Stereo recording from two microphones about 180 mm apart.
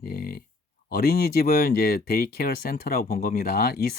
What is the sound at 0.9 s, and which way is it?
Speech, 60° left (ahead or behind).